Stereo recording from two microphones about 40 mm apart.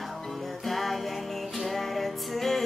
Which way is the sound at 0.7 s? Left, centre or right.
Centre.